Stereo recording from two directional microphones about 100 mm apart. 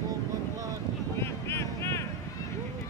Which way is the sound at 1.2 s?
25° left (ahead or behind).